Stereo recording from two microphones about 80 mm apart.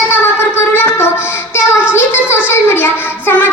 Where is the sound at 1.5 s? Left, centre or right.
Left.